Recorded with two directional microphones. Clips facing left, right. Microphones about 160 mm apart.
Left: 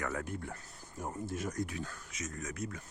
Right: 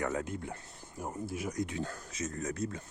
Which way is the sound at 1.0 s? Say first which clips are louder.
Right 1 dB; 10° right (ahead or behind).